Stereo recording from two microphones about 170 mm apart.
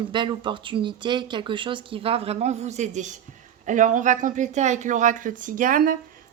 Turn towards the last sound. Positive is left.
turn(degrees=-55)  # may be behind; listen again after turning